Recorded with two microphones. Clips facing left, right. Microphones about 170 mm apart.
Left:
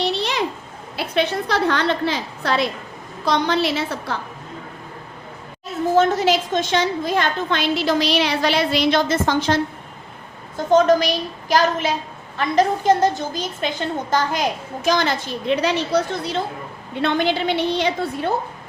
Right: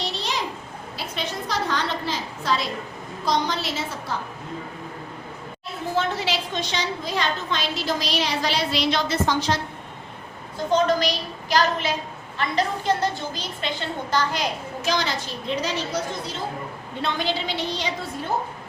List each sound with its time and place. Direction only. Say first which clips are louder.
0.0 s a sound: left 7 dB; 60° left (ahead or behind)
0.9 s a woman's voice: left 10 dB; 65° left (ahead or behind)
5.9 s a woman's voice: left 8 dB; 45° left (ahead or behind)
10.7 s a woman's voice: left 6 dB; 45° left (ahead or behind)